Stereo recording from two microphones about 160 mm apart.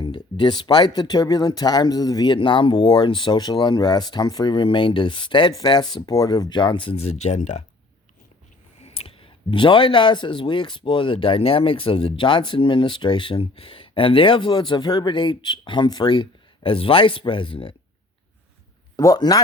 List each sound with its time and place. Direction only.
0.0 s speech: 30° left (ahead or behind); by 7.6 s 45° left (ahead or behind)
8.8 s speech: 35° left (ahead or behind)
18.9 s speech: 25° left (ahead or behind)